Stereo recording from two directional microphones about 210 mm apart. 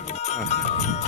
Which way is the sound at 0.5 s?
35° left (ahead or behind).